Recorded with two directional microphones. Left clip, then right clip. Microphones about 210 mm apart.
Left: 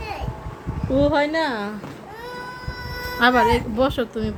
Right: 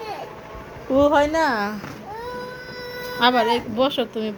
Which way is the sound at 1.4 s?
10° right (ahead or behind).